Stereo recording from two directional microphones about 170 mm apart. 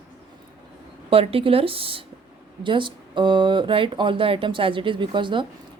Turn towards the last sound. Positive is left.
turn(degrees=-30)  # may be behind; listen again after turning